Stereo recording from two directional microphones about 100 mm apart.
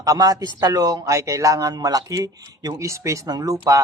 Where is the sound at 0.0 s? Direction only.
40° right (ahead or behind).